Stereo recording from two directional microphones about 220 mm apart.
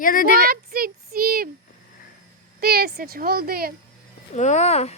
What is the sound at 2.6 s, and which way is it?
A woman's voice, 45° right (ahead or behind).